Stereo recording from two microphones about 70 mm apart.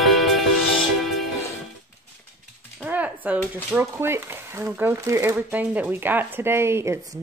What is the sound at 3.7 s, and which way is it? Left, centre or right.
Speech, right.